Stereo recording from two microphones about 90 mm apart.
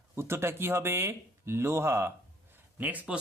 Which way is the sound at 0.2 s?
30° right (ahead or behind).